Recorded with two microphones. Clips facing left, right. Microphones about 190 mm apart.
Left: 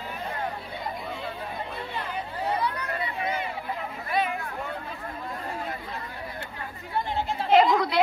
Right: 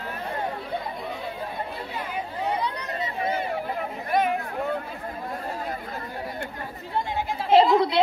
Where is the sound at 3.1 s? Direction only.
35° right (ahead or behind).